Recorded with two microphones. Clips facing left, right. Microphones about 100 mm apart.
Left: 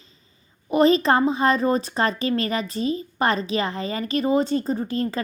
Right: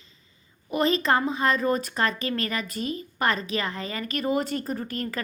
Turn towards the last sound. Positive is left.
turn(degrees=25)  # may be behind; listen again after turning